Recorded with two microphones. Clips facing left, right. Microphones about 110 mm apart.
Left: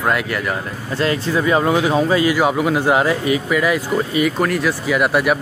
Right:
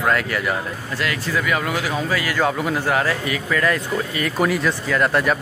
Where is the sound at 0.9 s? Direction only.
30° left (ahead or behind); by 3.8 s 10° left (ahead or behind).